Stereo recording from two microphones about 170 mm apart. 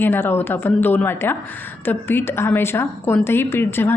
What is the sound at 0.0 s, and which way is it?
A woman's voice, 10° left (ahead or behind).